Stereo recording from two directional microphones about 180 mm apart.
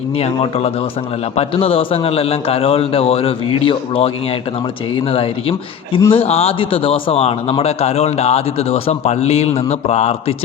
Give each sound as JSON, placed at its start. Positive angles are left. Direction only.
{"t": 0.2, "sound": "a man's voice", "side_deg": 35}